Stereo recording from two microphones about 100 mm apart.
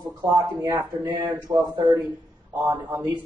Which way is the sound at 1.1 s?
45° right (ahead or behind).